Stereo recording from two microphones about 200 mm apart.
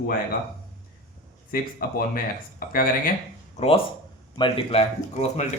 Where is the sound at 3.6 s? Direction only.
30° left (ahead or behind).